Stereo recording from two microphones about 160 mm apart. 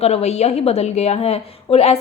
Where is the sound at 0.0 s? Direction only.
40° left (ahead or behind).